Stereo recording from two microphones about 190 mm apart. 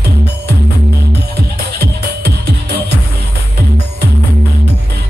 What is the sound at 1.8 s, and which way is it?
Music, 55° right (ahead or behind).